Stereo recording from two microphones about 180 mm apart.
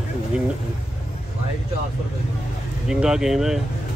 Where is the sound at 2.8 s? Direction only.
5° right (ahead or behind).